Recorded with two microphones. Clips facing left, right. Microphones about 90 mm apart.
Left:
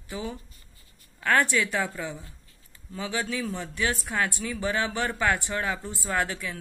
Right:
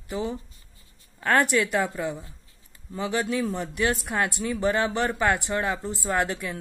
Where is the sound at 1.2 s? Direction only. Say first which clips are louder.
Right 2 dB; 30° right (ahead or behind).